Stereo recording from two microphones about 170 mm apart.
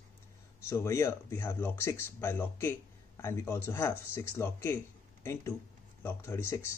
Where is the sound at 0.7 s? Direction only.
15° left (ahead or behind).